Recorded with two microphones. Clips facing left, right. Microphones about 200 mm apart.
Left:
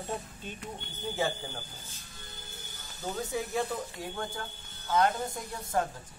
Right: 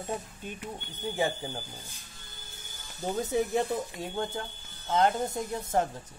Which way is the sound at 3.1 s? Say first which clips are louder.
Right 5 dB; 25° right (ahead or behind).